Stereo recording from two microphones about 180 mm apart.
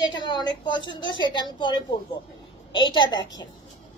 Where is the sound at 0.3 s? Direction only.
25° left (ahead or behind).